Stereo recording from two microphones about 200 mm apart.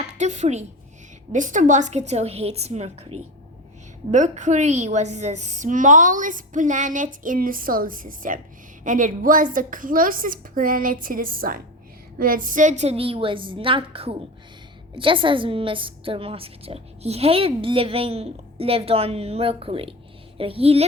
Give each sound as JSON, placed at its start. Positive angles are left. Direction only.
{"t": 0.2, "sound": "a woman's voice", "side_deg": -35}
{"t": 4.1, "sound": "a woman's voice", "side_deg": -40}